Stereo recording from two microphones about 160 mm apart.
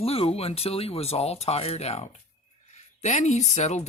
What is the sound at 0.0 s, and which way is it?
Speech, 40° left (ahead or behind).